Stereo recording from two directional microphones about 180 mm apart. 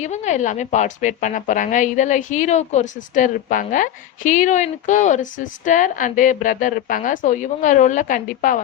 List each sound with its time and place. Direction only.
0.0 s a woman's voice: 40° left (ahead or behind)